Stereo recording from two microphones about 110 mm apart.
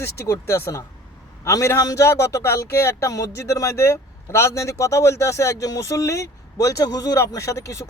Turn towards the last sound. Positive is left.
turn(degrees=30)  # may be behind; listen again after turning